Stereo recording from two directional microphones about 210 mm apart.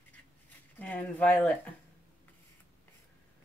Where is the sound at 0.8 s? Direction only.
5° left (ahead or behind).